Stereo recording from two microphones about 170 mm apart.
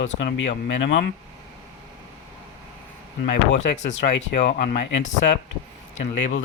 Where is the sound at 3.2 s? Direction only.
90° left.